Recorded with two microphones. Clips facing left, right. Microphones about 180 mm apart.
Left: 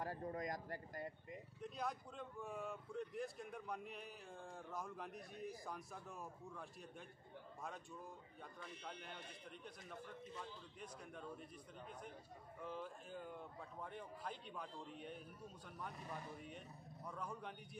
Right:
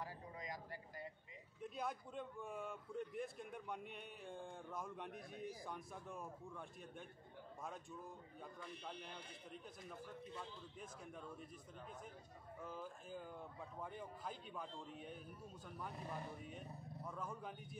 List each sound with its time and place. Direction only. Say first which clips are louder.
0.0 s speech: left 6 dB; 50° left (ahead or behind)
1.6 s speech: right 1 dB; centre (ahead or behind)
8.8 s speech: right 1 dB; centre (ahead or behind)
12.6 s speech: left 2 dB; 5° right (ahead or behind)